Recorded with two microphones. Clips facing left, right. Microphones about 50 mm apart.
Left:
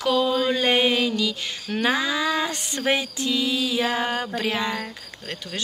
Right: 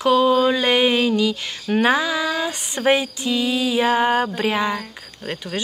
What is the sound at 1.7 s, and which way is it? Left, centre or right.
Speech, right.